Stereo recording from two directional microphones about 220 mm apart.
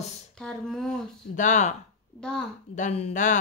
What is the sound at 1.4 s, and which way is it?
Speech, 35° left (ahead or behind).